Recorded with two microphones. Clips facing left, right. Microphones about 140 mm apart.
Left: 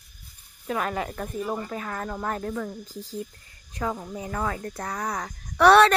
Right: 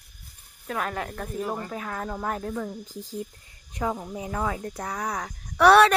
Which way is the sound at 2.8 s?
15° right (ahead or behind).